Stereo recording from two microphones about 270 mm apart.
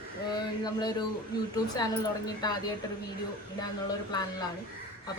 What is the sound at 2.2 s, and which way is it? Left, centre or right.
Speech, centre.